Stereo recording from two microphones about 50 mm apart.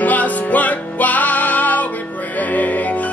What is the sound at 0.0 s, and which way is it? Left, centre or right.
Music, left.